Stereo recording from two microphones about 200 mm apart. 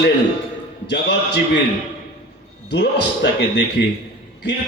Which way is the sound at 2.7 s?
60° left (ahead or behind).